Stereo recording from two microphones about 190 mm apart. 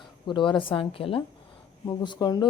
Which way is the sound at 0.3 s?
25° left (ahead or behind).